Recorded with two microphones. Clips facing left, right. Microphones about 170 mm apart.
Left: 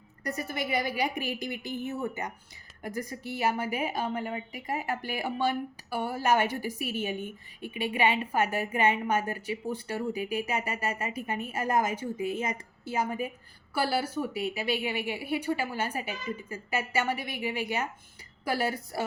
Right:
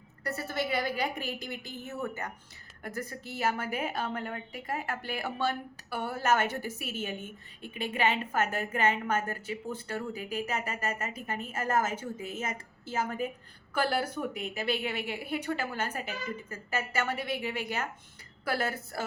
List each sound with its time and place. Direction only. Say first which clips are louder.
0.3 s a woman's voice: even; 15° left (ahead or behind)